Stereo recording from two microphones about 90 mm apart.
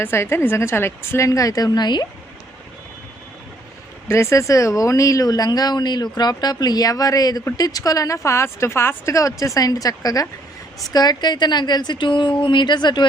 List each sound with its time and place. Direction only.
0.0 s a woman's voice: 25° left (ahead or behind); by 2.0 s 55° left (ahead or behind)
4.1 s speech: 35° left (ahead or behind); by 13.1 s 55° left (ahead or behind)